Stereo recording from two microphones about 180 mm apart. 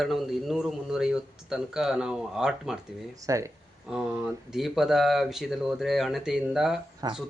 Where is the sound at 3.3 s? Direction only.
15° right (ahead or behind).